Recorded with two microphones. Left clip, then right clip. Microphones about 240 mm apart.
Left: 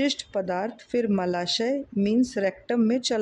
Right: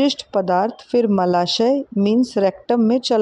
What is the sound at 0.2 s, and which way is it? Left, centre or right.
Speech, centre.